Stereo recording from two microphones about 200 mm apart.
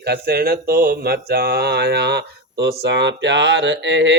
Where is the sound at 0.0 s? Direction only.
50° right (ahead or behind).